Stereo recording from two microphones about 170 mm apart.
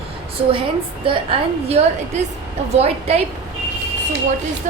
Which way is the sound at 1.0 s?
35° right (ahead or behind).